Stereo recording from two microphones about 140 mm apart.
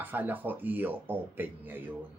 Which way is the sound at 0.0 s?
15° right (ahead or behind).